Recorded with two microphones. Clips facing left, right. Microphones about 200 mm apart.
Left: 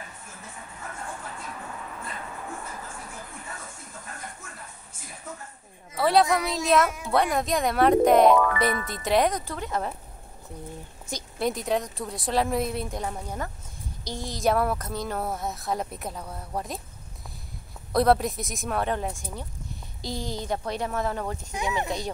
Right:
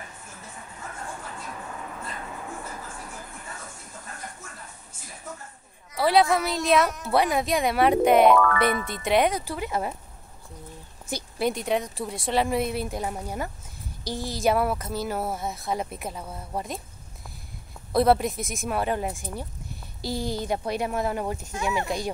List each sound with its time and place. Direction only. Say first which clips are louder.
5.9 s speech: right 1 dB; centre (ahead or behind)
11.1 s speech: right 2 dB; 5° right (ahead or behind)
17.9 s speech: right 1 dB; centre (ahead or behind)
21.5 s speech: left 1 dB; 20° left (ahead or behind)